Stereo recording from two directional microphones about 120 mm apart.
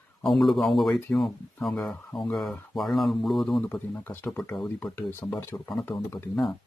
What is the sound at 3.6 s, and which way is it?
Speech, 15° left (ahead or behind).